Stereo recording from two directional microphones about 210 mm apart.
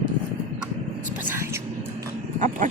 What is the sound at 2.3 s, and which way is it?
Dog, 35° right (ahead or behind).